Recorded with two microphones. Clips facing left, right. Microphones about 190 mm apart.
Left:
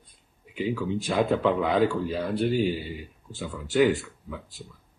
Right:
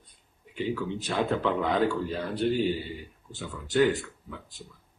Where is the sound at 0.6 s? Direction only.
10° left (ahead or behind).